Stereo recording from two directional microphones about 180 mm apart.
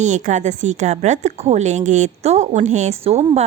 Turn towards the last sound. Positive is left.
turn(degrees=-35)  # may be behind; listen again after turning